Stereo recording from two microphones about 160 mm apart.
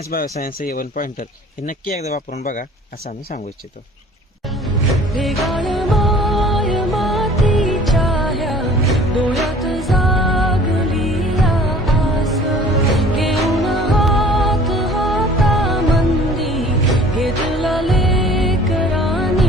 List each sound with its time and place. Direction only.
0.1 s speech: 65° left (ahead or behind)
2.4 s speech: 55° left (ahead or behind)
5.1 s music: centre (ahead or behind)